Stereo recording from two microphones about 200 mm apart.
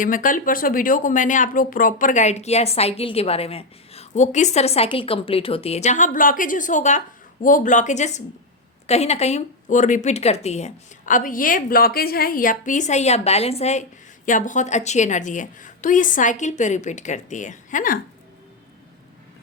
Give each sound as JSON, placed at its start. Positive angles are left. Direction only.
{"t": 0.0, "sound": "speech", "side_deg": 40}